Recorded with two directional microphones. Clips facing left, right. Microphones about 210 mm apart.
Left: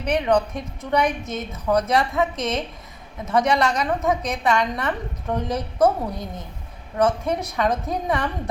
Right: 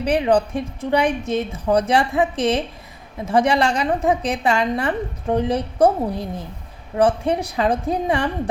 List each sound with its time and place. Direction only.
0.0 s a woman's voice: 30° right (ahead or behind)